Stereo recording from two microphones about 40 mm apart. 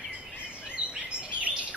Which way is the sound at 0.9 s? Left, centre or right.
Right.